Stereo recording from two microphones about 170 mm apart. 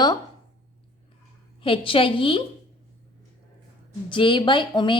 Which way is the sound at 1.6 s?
30° left (ahead or behind).